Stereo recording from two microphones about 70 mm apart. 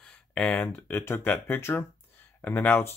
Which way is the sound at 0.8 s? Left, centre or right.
Left.